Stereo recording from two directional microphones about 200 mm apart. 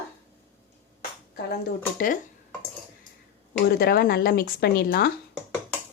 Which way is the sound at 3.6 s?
50° left (ahead or behind).